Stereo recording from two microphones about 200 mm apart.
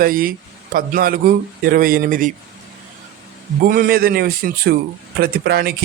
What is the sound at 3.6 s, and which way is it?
A man's voice, 45° right (ahead or behind).